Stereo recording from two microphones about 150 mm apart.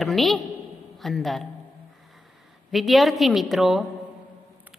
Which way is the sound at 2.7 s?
Centre (ahead or behind).